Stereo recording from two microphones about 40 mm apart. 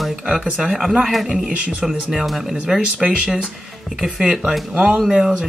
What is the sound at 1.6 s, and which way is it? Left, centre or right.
Speech, right.